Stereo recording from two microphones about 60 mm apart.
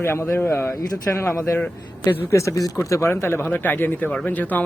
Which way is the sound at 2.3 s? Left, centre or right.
Left.